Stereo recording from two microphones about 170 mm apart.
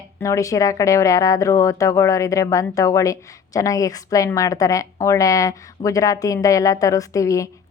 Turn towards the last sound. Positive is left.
turn(degrees=20)  # may be behind; listen again after turning